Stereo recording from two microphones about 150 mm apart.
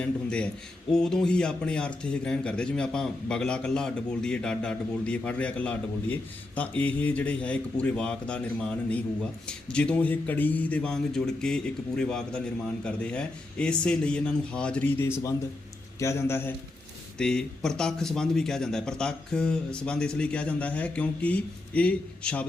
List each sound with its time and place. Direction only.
0.0 s a man's voice: 10° left (ahead or behind)
17.2 s a man's voice: 5° left (ahead or behind)